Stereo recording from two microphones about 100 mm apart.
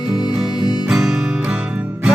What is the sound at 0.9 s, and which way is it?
Music, 5° right (ahead or behind).